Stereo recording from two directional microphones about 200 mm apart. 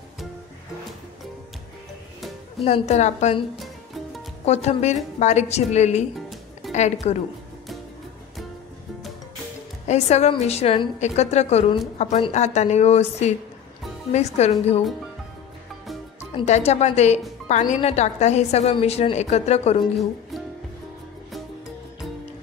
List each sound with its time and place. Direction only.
2.6 s a woman's voice: 35° left (ahead or behind)
3.5 s music: centre (ahead or behind)
4.5 s a woman's voice: 30° left (ahead or behind)
9.8 s a woman's voice: 35° left (ahead or behind)
16.3 s a woman's voice: 35° left (ahead or behind)
19.8 s speech: centre (ahead or behind)